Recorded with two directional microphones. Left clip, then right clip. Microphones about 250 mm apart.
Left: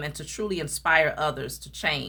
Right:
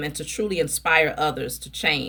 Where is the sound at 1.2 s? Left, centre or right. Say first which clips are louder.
Right 3 dB; left.